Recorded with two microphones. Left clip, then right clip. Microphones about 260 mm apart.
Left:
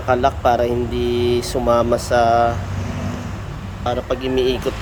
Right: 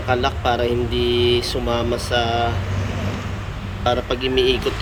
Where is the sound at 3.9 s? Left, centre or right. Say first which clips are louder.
Right 1 dB; centre.